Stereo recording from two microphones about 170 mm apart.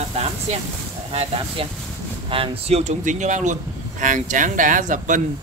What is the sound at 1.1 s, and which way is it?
Speech, 35° right (ahead or behind).